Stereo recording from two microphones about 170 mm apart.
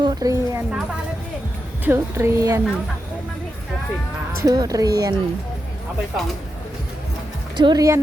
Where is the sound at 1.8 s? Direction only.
15° right (ahead or behind).